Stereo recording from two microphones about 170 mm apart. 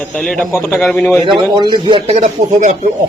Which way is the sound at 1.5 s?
25° right (ahead or behind).